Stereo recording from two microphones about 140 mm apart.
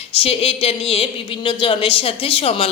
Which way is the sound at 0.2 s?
45° left (ahead or behind).